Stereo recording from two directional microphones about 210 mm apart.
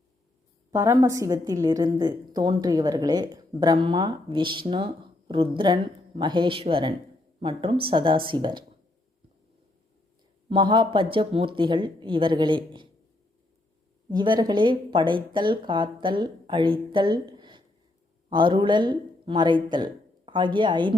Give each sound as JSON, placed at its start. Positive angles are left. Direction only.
{"t": 0.7, "sound": "a woman's voice", "side_deg": -15}
{"t": 10.5, "sound": "a woman's voice", "side_deg": -25}
{"t": 14.1, "sound": "a woman's voice", "side_deg": -20}